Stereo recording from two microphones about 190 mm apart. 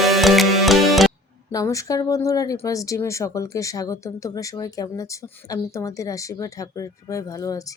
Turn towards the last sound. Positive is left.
turn(degrees=20)  # may be behind; listen again after turning